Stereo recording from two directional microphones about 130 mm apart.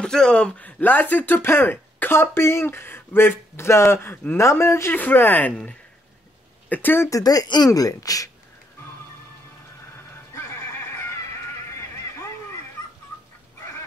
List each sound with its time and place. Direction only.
0.0 s speech: 5° left (ahead or behind); by 8.3 s 25° left (ahead or behind)
10.3 s neigh: 20° left (ahead or behind)